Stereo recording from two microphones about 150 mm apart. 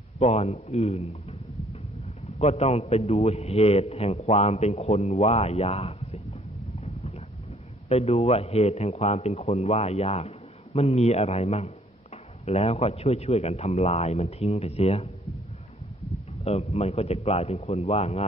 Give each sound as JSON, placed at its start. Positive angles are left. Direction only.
{"t": 0.2, "sound": "a man's voice", "side_deg": 45}
{"t": 2.3, "sound": "a man's voice", "side_deg": 45}
{"t": 6.7, "sound": "a sound", "side_deg": 45}
{"t": 7.9, "sound": "a man's voice", "side_deg": 45}
{"t": 16.4, "sound": "a man's voice", "side_deg": 45}